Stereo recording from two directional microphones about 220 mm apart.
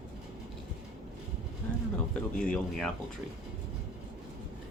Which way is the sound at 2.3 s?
5° left (ahead or behind).